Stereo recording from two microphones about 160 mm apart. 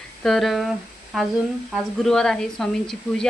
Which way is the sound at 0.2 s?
Centre (ahead or behind).